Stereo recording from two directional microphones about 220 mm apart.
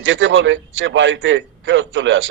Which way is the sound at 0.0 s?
60° right (ahead or behind).